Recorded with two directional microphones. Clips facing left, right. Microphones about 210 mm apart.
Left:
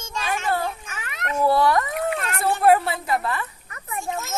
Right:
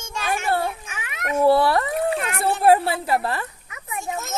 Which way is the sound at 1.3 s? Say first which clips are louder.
Right 2 dB; 30° right (ahead or behind).